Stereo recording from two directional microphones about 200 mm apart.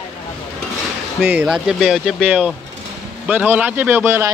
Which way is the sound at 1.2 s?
10° right (ahead or behind).